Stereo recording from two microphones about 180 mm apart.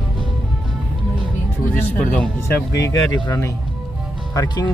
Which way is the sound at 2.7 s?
20° left (ahead or behind).